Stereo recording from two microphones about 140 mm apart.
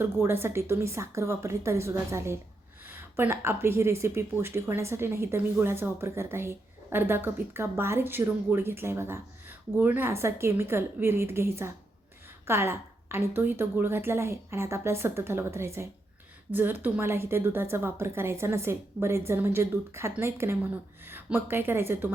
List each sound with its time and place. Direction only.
0.0 s a woman's voice: 15° right (ahead or behind)